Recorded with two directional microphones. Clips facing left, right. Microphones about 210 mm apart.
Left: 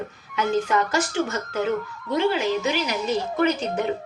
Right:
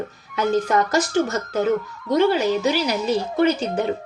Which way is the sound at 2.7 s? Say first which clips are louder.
Right 4 dB; 35° right (ahead or behind).